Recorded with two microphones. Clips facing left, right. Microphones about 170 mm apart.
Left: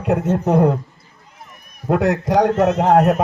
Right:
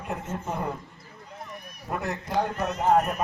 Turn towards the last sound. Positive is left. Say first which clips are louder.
# left 9 dB
turn(degrees=70)  # may be behind; listen again after turning